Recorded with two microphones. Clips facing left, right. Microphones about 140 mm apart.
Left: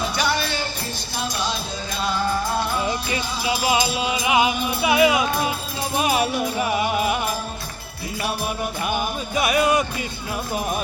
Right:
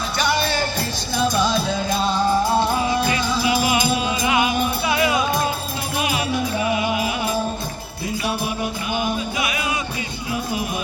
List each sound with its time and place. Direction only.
3.7 s music: 20° left (ahead or behind)
9.3 s music: 45° left (ahead or behind)